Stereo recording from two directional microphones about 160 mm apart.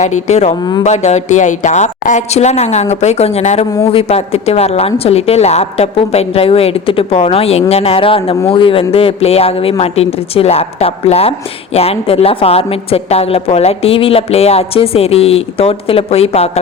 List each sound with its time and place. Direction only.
0.0 s a woman's voice: 45° left (ahead or behind)
0.6 s speech: 25° left (ahead or behind)
0.9 s a woman's voice: 45° left (ahead or behind)